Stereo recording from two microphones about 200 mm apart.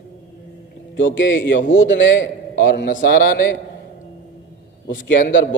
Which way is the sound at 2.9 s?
45° left (ahead or behind).